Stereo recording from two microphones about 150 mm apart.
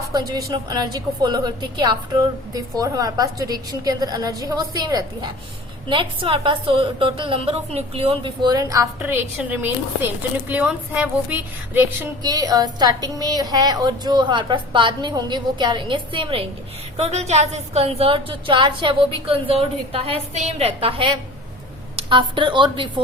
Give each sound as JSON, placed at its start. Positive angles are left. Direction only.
{"t": 0.1, "sound": "a woman's voice", "side_deg": -25}
{"t": 12.2, "sound": "a woman's voice", "side_deg": -25}
{"t": 17.0, "sound": "a woman's voice", "side_deg": -45}